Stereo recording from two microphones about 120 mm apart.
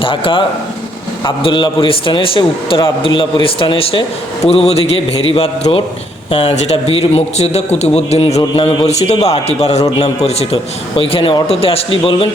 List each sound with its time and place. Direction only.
0.0 s a man's voice: 45° left (ahead or behind)
6.4 s a man's voice: 65° left (ahead or behind); by 12.3 s 50° left (ahead or behind)